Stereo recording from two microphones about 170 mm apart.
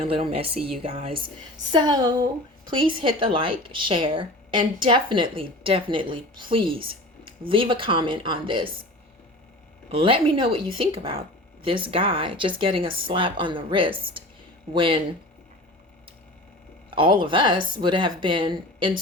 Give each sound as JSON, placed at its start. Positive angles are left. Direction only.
{"t": 0.1, "sound": "speech", "side_deg": -35}
{"t": 1.7, "sound": "speech", "side_deg": -25}
{"t": 9.9, "sound": "speech", "side_deg": -30}
{"t": 16.9, "sound": "speech", "side_deg": -30}